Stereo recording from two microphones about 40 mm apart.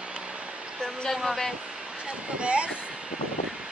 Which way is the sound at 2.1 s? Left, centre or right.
Right.